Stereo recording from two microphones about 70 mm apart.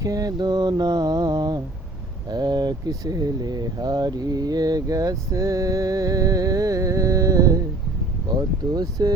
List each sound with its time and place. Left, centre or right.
0.0 s mantra: right
2.3 s speech: right
8.4 s speech: right